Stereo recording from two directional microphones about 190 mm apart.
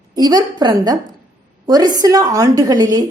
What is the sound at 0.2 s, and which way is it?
A woman's voice, 20° right (ahead or behind).